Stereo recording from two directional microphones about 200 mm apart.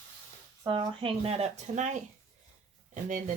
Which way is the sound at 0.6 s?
25° right (ahead or behind).